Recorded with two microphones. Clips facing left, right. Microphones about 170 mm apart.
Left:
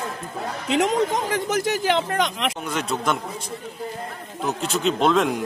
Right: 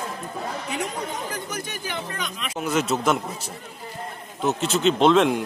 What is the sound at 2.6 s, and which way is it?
Speech, 5° right (ahead or behind).